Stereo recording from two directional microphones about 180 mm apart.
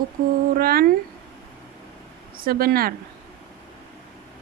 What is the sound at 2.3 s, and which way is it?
Speech, 55° right (ahead or behind).